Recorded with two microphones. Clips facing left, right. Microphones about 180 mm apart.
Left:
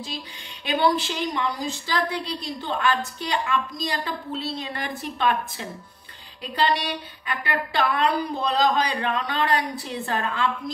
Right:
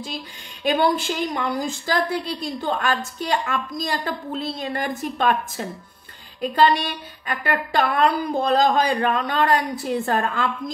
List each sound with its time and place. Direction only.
0.7 s a woman's voice: 50° right (ahead or behind)